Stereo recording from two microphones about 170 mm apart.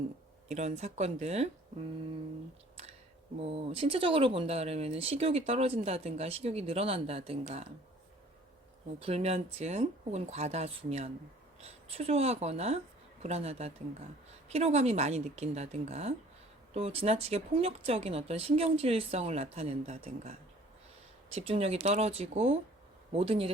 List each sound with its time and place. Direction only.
0.4 s speech: 40° right (ahead or behind)
3.4 s speech: 35° right (ahead or behind)
9.0 s speech: 35° right (ahead or behind)
21.3 s speech: 35° right (ahead or behind)